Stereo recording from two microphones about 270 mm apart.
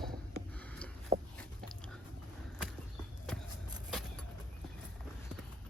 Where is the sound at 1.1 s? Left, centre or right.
Centre.